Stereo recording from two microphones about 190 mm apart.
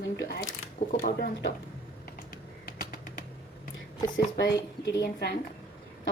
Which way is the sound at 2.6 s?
50° left (ahead or behind).